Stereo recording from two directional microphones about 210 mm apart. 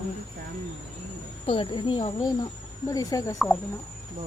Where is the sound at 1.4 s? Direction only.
25° left (ahead or behind).